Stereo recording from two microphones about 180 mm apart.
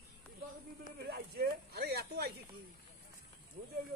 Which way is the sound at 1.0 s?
60° right (ahead or behind).